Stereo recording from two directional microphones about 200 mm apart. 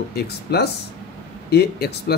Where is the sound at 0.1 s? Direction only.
55° left (ahead or behind).